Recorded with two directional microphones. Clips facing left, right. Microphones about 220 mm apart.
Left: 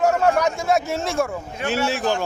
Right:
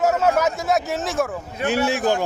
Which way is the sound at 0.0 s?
5° right (ahead or behind).